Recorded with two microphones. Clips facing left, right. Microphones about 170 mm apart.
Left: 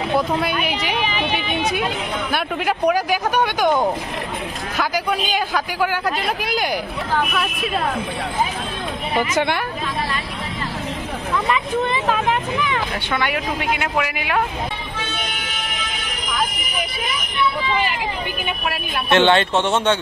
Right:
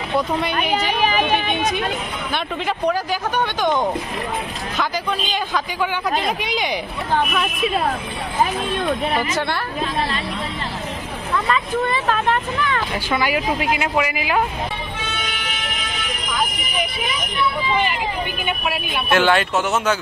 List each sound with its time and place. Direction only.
1.0 s speech: 45° right (ahead or behind)
2.3 s a man's voice: 10° left (ahead or behind)
9.3 s speech: 20° left (ahead or behind)
11.4 s speech: 15° left (ahead or behind)
13.1 s a man's voice: 5° right (ahead or behind)
19.0 s speech: 25° left (ahead or behind)